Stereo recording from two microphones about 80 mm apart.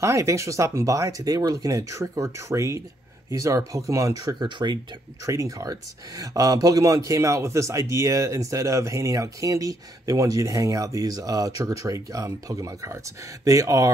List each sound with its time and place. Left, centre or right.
0.0 s speech: right